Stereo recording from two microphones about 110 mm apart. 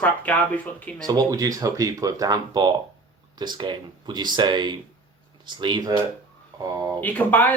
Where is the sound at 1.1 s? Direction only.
35° right (ahead or behind).